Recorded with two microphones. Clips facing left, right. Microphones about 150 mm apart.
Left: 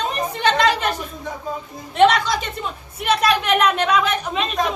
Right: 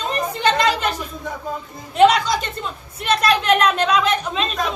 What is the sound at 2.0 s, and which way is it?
A woman's voice, centre (ahead or behind).